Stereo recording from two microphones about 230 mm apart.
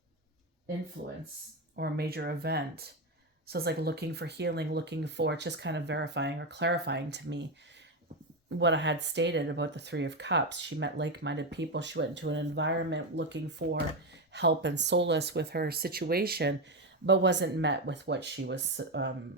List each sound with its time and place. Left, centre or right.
1.0 s speech: right
8.4 s speech: right